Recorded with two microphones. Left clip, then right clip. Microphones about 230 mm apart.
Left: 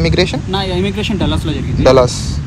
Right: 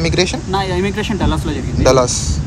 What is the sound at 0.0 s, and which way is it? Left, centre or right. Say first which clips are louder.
Speech: left 2 dB; centre.